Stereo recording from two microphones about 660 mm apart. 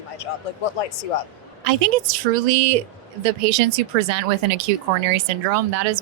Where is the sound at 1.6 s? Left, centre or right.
Right.